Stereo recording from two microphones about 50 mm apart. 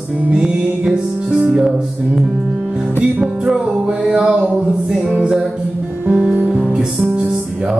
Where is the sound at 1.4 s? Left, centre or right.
Centre.